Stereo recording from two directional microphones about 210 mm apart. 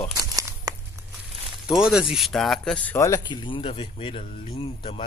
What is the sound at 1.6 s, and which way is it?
Speech, 5° right (ahead or behind).